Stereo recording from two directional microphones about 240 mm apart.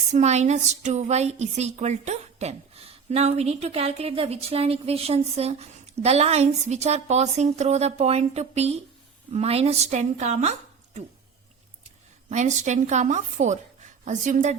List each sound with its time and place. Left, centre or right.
0.1 s a woman's voice: right
12.3 s a woman's voice: right